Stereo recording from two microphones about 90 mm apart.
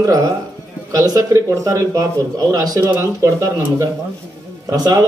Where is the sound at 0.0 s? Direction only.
40° right (ahead or behind).